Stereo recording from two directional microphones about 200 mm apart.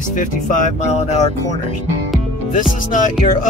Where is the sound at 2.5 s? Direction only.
40° left (ahead or behind).